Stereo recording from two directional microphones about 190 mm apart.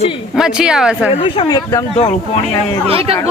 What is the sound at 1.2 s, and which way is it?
Speech, 25° left (ahead or behind).